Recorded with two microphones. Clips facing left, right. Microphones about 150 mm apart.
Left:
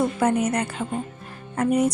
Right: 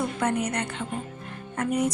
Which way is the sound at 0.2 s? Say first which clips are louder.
Left 5 dB; 30° left (ahead or behind).